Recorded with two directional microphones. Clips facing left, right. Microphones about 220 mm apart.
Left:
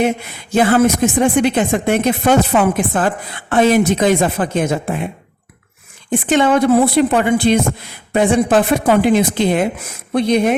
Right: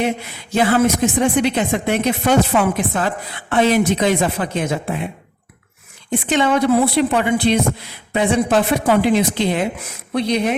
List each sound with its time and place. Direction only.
0.5 s a woman's voice: 50° left (ahead or behind)
6.1 s a woman's voice: 50° left (ahead or behind)